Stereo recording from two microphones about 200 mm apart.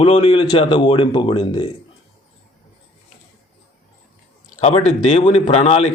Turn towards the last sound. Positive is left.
turn(degrees=30)  # may be behind; listen again after turning